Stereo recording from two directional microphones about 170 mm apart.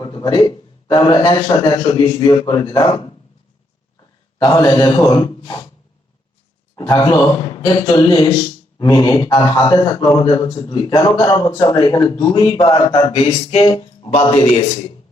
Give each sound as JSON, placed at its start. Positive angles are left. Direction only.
{"t": 0.0, "sound": "a man's voice", "side_deg": 25}
{"t": 4.4, "sound": "a man's voice", "side_deg": 20}
{"t": 6.7, "sound": "a man's voice", "side_deg": 20}